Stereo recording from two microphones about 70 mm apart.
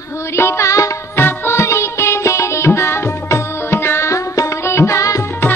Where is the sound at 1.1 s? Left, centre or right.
Left.